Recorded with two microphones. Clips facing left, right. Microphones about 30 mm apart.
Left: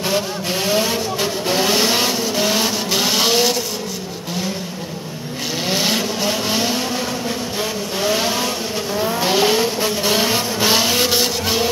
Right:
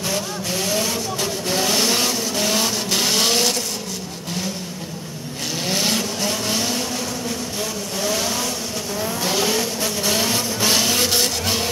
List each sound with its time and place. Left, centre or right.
0.1 s vehicle: left; by 3.5 s centre
5.7 s vehicle: centre
8.0 s vehicle: left; by 11.6 s centre